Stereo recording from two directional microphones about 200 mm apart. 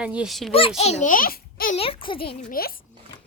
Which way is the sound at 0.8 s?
35° left (ahead or behind).